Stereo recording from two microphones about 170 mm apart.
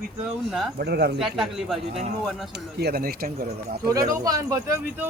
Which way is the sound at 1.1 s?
Centre (ahead or behind).